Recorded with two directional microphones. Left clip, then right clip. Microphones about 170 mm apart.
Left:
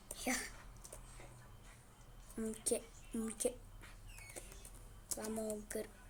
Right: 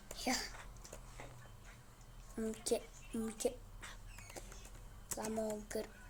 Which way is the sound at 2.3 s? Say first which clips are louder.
Right 2 dB; 5° left (ahead or behind).